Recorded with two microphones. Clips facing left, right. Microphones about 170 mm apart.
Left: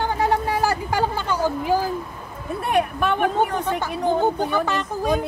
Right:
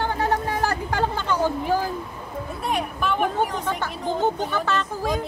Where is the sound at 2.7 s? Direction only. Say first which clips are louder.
Left 5 dB; 60° left (ahead or behind).